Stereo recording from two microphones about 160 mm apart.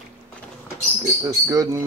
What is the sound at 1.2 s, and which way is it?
Speech, 20° right (ahead or behind).